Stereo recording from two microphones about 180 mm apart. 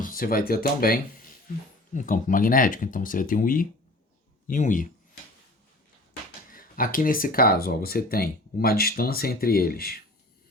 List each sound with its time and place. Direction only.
0.0 s speech: 50° left (ahead or behind)
6.5 s speech: 50° left (ahead or behind)